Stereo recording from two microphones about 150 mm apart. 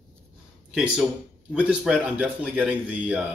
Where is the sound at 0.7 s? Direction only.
5° right (ahead or behind).